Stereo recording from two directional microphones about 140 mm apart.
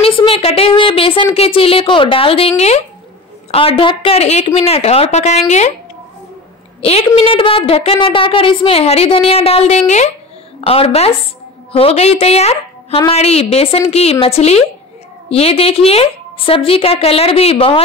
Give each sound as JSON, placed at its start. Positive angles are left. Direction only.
{"t": 0.0, "sound": "a woman's voice", "side_deg": 40}
{"t": 6.8, "sound": "a woman's voice", "side_deg": 45}
{"t": 10.6, "sound": "a woman's voice", "side_deg": 45}